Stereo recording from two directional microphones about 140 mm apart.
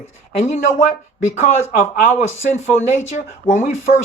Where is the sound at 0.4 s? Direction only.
55° left (ahead or behind).